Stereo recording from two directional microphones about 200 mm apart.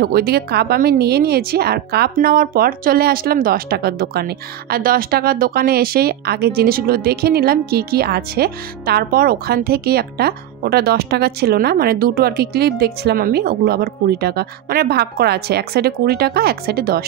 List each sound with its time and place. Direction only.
0.0 s a woman's voice: 50° right (ahead or behind)